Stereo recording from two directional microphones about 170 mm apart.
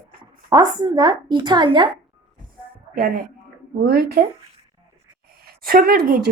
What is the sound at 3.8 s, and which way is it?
Speech, 70° right (ahead or behind).